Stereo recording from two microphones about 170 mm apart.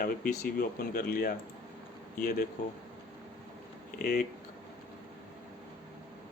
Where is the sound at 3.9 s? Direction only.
65° left (ahead or behind).